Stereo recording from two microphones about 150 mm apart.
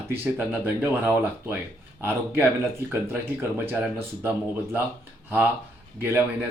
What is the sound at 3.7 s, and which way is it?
Speech, 15° right (ahead or behind).